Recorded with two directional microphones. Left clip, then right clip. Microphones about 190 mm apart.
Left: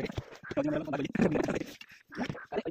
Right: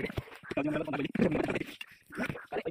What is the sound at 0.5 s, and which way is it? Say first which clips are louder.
Speech: left 1 dB; 55° left (ahead or behind).